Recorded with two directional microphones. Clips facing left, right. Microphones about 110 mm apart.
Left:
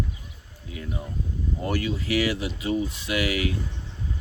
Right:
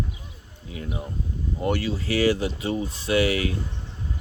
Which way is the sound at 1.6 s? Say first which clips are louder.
Right 2 dB; 30° right (ahead or behind).